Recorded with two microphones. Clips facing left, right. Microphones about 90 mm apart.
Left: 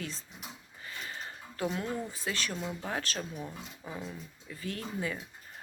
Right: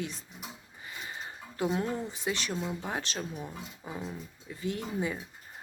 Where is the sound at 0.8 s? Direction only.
20° right (ahead or behind).